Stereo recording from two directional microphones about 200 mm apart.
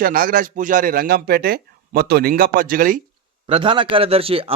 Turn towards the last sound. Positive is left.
turn(degrees=-30)  # may be behind; listen again after turning